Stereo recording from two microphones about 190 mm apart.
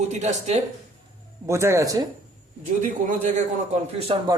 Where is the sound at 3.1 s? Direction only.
40° right (ahead or behind).